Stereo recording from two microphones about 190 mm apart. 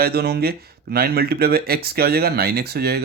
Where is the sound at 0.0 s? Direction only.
55° right (ahead or behind).